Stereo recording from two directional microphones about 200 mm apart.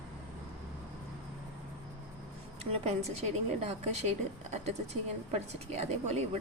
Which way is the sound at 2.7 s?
30° right (ahead or behind).